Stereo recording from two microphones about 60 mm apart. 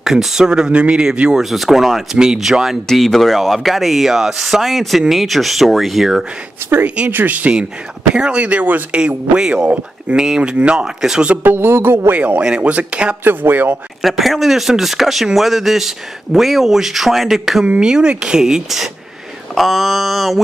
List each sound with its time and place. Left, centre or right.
0.0 s speech: centre
1.4 s speech: centre
2.9 s speech: centre
6.6 s speech: right
7.1 s speech: right
8.1 s speech: centre
9.3 s speech: centre
11.4 s a sound: right
12.1 s speech: right
13.2 s a sound: right
14.0 s speech: centre